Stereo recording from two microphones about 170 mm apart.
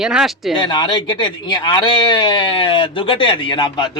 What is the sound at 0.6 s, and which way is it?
Speech, 25° left (ahead or behind).